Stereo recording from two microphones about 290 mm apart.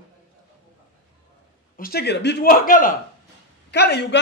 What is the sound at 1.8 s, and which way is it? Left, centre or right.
Speech, left.